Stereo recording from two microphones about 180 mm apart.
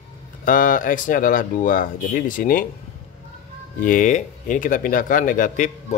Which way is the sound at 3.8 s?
45° left (ahead or behind).